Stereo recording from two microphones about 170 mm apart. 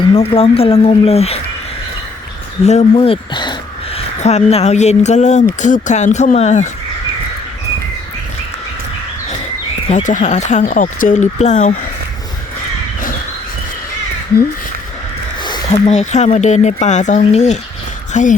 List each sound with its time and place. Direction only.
0.0 s speech: 35° left (ahead or behind)
2.6 s speech: 40° left (ahead or behind)
3.9 s speech: 40° left (ahead or behind)
9.9 s speech: 45° left (ahead or behind)
15.9 s speech: 45° left (ahead or behind)